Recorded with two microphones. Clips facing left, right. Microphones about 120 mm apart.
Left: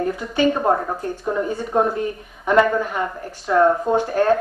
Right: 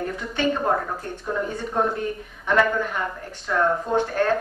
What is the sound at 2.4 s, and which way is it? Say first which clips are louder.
Speech: left 4 dB; 5° left (ahead or behind).